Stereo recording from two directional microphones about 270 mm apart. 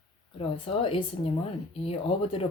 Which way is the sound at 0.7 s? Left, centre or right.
Centre.